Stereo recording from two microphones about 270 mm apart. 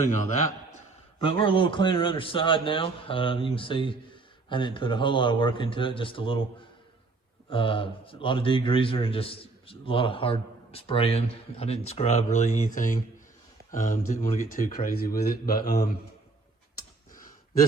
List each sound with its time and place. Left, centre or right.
1.2 s a man's voice: centre
7.5 s a man's voice: centre; by 15.9 s left